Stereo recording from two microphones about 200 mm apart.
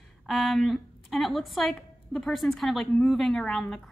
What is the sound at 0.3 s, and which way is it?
Speech, centre (ahead or behind).